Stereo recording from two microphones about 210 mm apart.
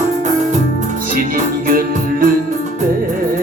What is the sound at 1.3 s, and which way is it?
Music, 40° right (ahead or behind).